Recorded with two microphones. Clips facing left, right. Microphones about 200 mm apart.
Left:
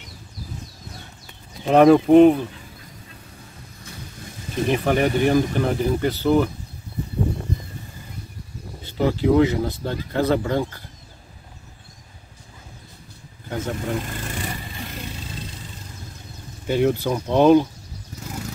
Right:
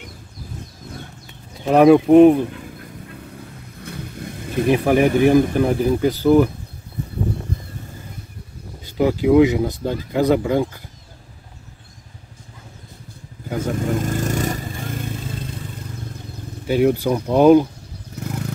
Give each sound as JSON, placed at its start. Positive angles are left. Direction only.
{"t": 1.7, "sound": "speech", "side_deg": -5}
{"t": 2.5, "sound": "goose", "side_deg": -60}
{"t": 3.8, "sound": "vehicle", "side_deg": -60}
{"t": 4.6, "sound": "speech", "side_deg": -10}
{"t": 8.8, "sound": "speech", "side_deg": -10}
{"t": 13.5, "sound": "speech", "side_deg": -5}
{"t": 13.9, "sound": "vehicle", "side_deg": -45}
{"t": 16.6, "sound": "speech", "side_deg": -10}